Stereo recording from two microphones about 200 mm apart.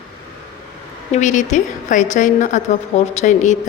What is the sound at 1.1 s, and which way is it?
A woman's voice, 35° left (ahead or behind).